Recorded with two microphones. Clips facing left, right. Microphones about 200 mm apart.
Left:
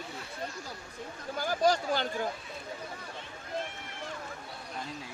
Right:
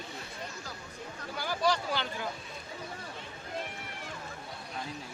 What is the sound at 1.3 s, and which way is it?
Speech, 45° left (ahead or behind).